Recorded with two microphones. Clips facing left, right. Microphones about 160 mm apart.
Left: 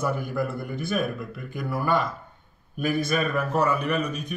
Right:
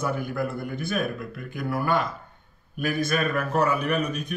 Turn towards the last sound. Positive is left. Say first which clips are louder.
# even
turn(degrees=-5)  # may be behind; listen again after turning